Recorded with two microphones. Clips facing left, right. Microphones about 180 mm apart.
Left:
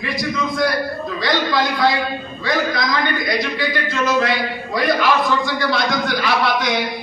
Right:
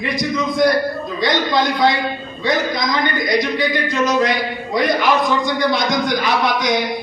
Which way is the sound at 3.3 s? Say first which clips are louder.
Right 3 dB; 20° right (ahead or behind).